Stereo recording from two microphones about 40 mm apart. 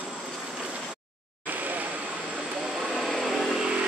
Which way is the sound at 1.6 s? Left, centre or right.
Right.